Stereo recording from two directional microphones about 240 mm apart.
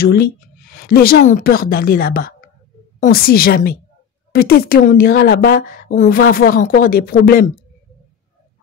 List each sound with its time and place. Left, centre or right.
0.0 s a woman's voice: left